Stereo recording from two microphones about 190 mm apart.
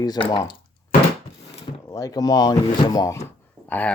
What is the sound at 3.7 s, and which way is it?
Speech, 10° left (ahead or behind).